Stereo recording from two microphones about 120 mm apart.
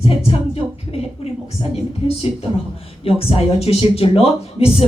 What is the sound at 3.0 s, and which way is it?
Speech, 50° left (ahead or behind).